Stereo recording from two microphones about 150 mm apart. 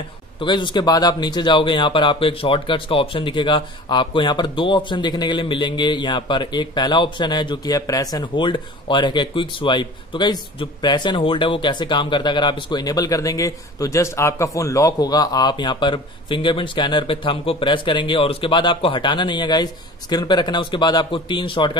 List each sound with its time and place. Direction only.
0.4 s speech: 30° left (ahead or behind)